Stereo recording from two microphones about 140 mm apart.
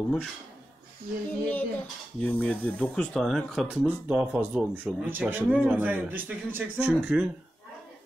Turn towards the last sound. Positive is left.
turn(degrees=-10)  # may be behind; listen again after turning